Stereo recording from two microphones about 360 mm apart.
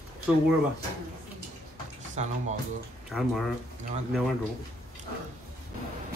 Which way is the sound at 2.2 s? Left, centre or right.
Centre.